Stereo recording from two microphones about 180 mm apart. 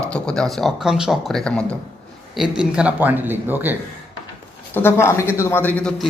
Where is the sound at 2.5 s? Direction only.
5° right (ahead or behind).